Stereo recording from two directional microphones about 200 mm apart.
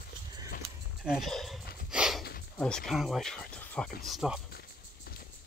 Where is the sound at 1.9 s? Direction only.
5° right (ahead or behind).